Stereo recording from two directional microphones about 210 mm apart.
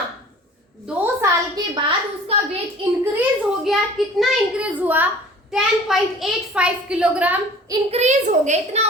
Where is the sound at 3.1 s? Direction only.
Centre (ahead or behind).